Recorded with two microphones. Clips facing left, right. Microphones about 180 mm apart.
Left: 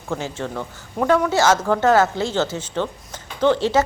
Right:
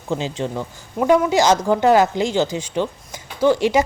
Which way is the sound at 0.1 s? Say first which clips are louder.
Right 3 dB; 20° right (ahead or behind).